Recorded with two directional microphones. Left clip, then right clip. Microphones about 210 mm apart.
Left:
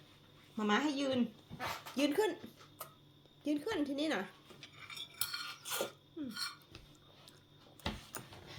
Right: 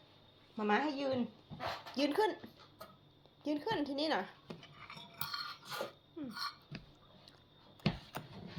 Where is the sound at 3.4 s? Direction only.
30° left (ahead or behind).